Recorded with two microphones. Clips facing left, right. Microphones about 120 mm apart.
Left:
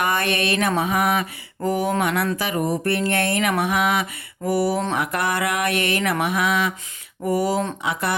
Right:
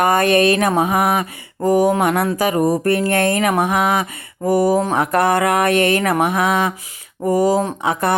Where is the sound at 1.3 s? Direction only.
40° right (ahead or behind).